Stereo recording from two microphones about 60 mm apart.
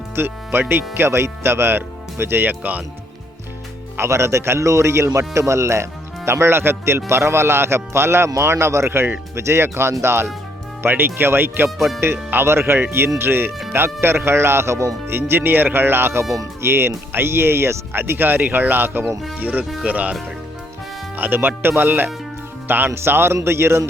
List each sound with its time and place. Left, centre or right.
0.2 s speech: right
3.9 s speech: right
15.1 s speech: right
21.2 s speech: right